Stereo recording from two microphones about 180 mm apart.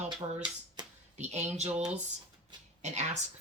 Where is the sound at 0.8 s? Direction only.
25° right (ahead or behind).